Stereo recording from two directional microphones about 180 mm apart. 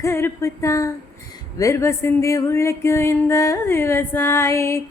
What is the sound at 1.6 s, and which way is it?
Speech, 15° left (ahead or behind).